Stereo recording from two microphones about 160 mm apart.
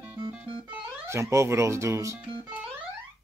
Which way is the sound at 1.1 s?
20° right (ahead or behind).